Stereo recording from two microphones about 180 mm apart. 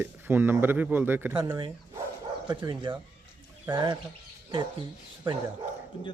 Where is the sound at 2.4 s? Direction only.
25° right (ahead or behind).